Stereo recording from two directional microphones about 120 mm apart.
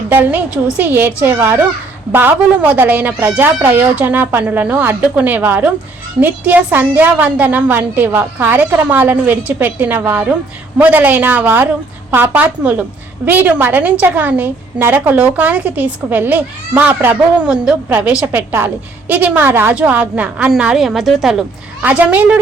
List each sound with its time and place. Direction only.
0.1 s a woman's voice: 15° right (ahead or behind)